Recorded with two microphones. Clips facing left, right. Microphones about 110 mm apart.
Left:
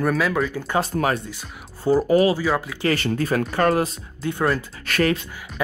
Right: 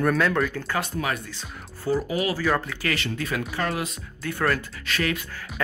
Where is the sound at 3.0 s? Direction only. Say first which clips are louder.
Left 7 dB; 40° left (ahead or behind).